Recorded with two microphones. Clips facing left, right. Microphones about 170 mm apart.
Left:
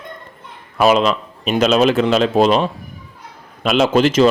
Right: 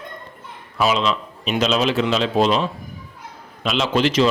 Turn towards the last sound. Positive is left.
turn(degrees=45)  # may be behind; listen again after turning